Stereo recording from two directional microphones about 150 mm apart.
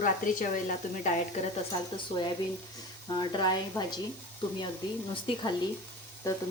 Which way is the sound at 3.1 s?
30° left (ahead or behind).